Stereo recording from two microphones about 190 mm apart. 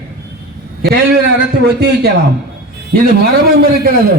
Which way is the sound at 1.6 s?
60° right (ahead or behind).